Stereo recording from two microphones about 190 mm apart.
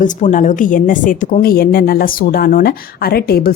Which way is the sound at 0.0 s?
40° left (ahead or behind).